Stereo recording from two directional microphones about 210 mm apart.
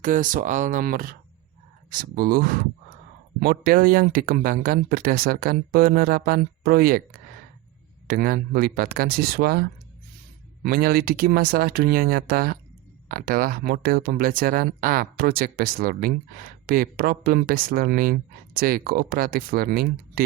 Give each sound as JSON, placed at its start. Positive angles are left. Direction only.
{"t": 0.0, "sound": "speech", "side_deg": -40}
{"t": 8.0, "sound": "speech", "side_deg": -45}